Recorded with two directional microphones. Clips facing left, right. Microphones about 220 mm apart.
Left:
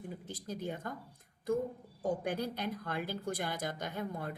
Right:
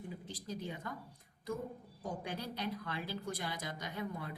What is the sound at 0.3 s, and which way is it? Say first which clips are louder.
Speech: left 4 dB; 50° left (ahead or behind).